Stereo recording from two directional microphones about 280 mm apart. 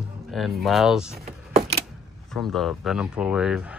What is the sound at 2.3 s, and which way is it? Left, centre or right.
A man's voice, centre.